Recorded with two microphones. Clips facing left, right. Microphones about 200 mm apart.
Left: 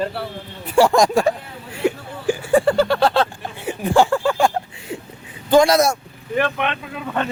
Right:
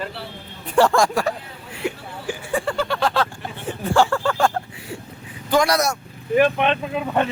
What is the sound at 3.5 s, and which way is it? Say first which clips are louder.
Speech: left 2 dB; 15° left (ahead or behind).